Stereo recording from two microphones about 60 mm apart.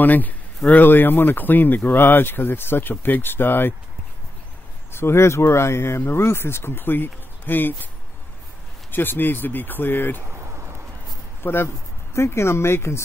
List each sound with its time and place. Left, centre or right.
0.0 s speech: left
4.9 s speech: left
8.9 s speech: left
11.4 s speech: left